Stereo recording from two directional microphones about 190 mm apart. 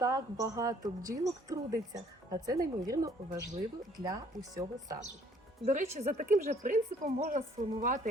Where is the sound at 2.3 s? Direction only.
20° right (ahead or behind).